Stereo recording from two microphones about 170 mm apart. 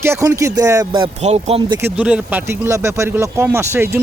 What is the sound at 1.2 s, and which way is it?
Speech, 40° right (ahead or behind).